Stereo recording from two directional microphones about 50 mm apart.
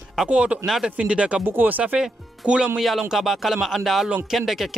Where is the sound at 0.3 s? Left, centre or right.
Right.